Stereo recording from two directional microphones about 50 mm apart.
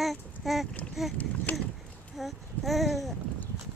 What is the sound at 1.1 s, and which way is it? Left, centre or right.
Speech, left.